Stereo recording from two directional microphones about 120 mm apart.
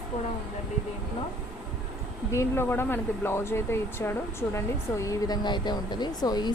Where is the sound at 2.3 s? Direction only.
20° left (ahead or behind).